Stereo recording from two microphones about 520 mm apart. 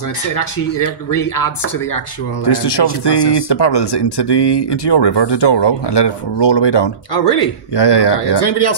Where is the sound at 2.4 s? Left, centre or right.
Left.